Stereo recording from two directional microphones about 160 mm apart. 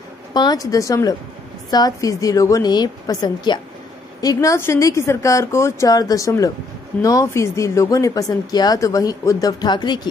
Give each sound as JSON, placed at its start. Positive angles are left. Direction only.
{"t": 0.3, "sound": "speech", "side_deg": 25}